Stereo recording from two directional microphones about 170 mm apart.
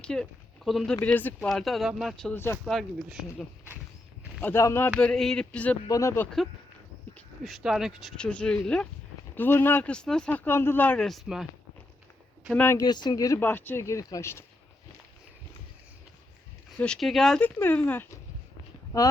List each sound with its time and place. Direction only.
0.0 s speech: 5° left (ahead or behind)
1.0 s speech: 10° left (ahead or behind)
2.6 s speech: centre (ahead or behind)
4.4 s speech: 15° left (ahead or behind)
7.4 s speech: centre (ahead or behind)
12.5 s speech: 15° left (ahead or behind)
12.8 s speech: 25° left (ahead or behind)
16.7 s speech: 5° left (ahead or behind)